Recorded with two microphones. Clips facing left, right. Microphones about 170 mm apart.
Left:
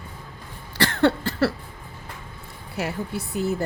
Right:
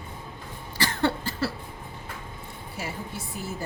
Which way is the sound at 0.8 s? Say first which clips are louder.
Left 6 dB; 65° left (ahead or behind).